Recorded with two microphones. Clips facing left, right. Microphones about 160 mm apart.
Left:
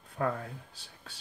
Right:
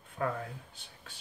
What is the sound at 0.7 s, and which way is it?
Speech, 35° left (ahead or behind).